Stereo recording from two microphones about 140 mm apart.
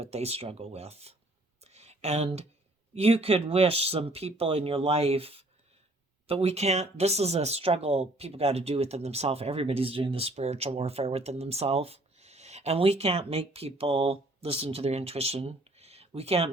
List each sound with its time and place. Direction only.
0.0 s speech: 50° right (ahead or behind)
1.6 s a sound: 50° right (ahead or behind)
2.9 s speech: 45° right (ahead or behind)